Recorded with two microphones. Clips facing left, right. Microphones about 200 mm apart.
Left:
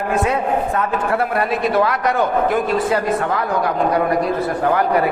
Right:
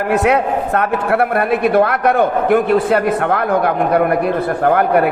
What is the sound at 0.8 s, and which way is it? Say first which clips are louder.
A man's voice: right 4 dB; 60° right (ahead or behind).